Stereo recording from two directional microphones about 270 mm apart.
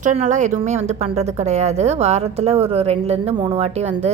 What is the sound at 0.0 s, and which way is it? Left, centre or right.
A woman's voice, right.